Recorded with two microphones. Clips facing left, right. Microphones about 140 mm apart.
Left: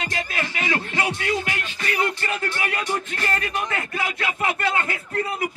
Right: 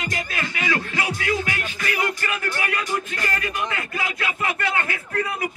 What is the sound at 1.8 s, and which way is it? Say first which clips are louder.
Speech: left 1 dB; 30° left (ahead or behind).